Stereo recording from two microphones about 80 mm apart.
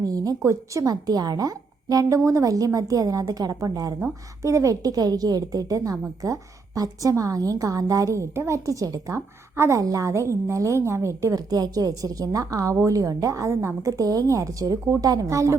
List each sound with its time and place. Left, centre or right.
0.0 s a woman's voice: right